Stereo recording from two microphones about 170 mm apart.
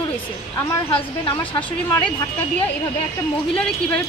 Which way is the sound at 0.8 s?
30° left (ahead or behind).